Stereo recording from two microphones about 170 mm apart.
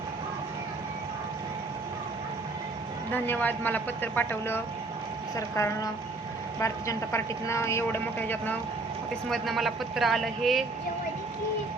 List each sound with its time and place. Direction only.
3.1 s speech: 10° left (ahead or behind)
9.3 s speech: centre (ahead or behind)